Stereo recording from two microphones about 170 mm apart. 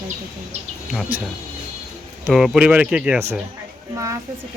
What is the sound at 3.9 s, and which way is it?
Speech, 20° right (ahead or behind).